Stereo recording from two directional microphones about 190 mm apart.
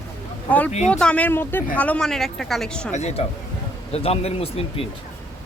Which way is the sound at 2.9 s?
35° left (ahead or behind).